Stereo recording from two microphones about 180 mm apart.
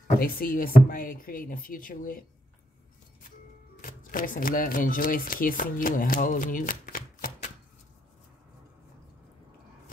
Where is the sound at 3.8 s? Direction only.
50° left (ahead or behind).